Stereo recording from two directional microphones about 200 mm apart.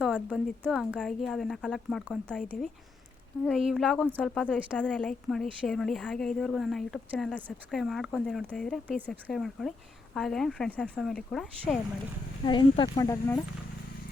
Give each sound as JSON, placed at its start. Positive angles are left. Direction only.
{"t": 0.0, "sound": "speech", "side_deg": 5}
{"t": 12.5, "sound": "speech", "side_deg": 20}